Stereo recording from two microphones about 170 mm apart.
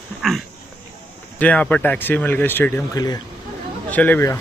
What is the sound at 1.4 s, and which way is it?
Speech, 10° left (ahead or behind).